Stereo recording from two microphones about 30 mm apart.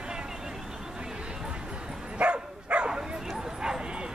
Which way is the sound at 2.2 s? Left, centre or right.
Right.